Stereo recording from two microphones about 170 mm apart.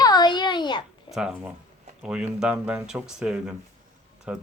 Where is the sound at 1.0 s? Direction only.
5° right (ahead or behind).